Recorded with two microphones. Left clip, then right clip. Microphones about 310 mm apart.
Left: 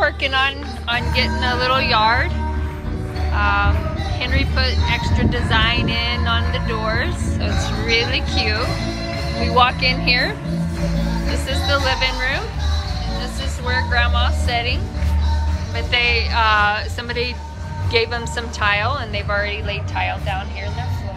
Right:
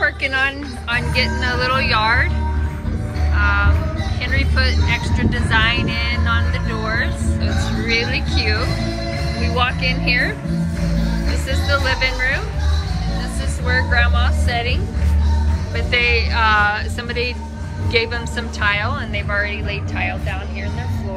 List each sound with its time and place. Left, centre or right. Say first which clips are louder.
0.0 s speech: even; centre
3.3 s speech: even; centre
11.4 s speech: even; centre
13.7 s speech: right 1 dB; centre
15.9 s speech: right 1 dB; centre